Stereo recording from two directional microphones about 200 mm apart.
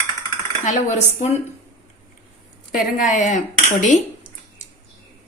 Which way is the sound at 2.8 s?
40° left (ahead or behind).